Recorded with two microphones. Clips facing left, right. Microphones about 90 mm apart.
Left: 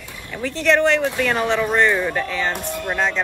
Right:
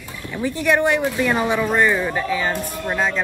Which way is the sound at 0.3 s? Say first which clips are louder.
Left 1 dB; 15° right (ahead or behind).